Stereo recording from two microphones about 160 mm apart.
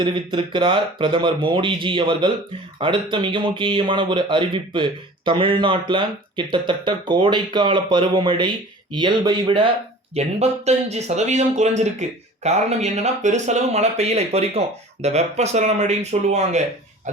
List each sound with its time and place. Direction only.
0.0 s speech: 30° right (ahead or behind)
10.2 s speech: 40° right (ahead or behind)